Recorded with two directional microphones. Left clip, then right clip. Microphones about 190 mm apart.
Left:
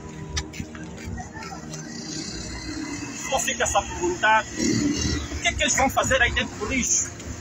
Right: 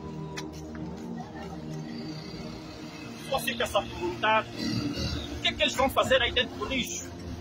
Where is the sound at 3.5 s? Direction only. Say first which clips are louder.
Left 5 dB; 15° right (ahead or behind).